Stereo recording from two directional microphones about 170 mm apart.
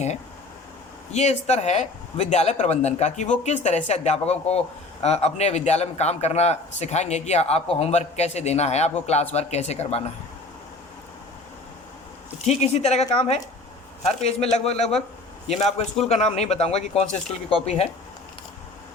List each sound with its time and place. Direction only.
1.1 s a man's voice: 40° left (ahead or behind)
12.5 s a man's voice: 40° left (ahead or behind)